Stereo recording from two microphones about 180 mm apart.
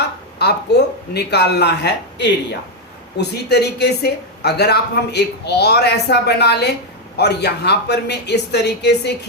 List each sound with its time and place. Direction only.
0.3 s speech: 65° left (ahead or behind)